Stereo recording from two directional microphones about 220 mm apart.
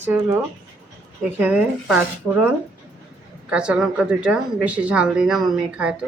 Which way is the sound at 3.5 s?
5° right (ahead or behind).